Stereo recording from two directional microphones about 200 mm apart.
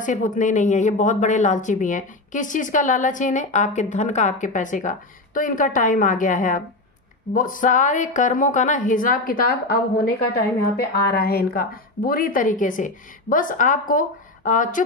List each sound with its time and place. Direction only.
0.0 s speech: 40° left (ahead or behind)